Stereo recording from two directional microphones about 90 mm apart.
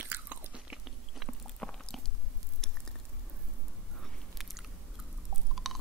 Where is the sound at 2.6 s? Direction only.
5° left (ahead or behind).